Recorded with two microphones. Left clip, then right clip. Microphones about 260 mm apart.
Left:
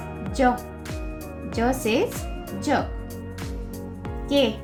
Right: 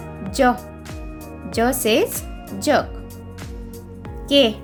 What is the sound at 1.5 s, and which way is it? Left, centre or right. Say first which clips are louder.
Speech: right 5 dB; right.